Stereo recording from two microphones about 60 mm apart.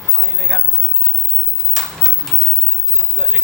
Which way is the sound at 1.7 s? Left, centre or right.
Centre.